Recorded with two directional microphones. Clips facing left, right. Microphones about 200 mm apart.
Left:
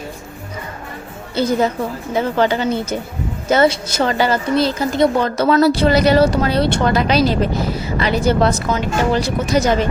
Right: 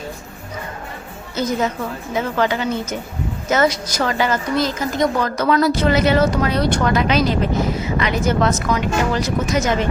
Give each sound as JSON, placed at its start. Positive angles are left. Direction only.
{"t": 1.4, "sound": "a woman's voice", "side_deg": 30}